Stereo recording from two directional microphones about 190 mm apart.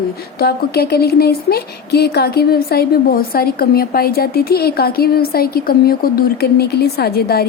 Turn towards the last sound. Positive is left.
turn(degrees=55)  # may be behind; listen again after turning